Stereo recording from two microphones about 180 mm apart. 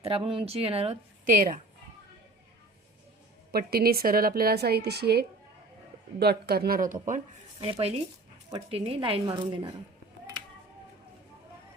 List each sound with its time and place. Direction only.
0.0 s a woman's voice: 30° right (ahead or behind)
3.5 s a woman's voice: 60° right (ahead or behind)
7.6 s a woman's voice: 30° right (ahead or behind)